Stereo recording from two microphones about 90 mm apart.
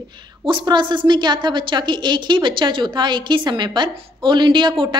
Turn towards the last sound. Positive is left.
turn(degrees=-60)  # may be behind; listen again after turning